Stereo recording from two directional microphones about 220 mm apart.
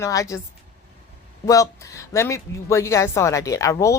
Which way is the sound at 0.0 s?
15° left (ahead or behind).